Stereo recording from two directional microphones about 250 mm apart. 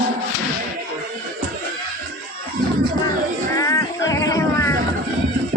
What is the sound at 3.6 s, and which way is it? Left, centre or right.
Music, centre.